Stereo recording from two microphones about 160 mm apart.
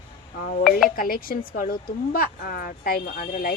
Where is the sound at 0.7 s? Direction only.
Centre (ahead or behind).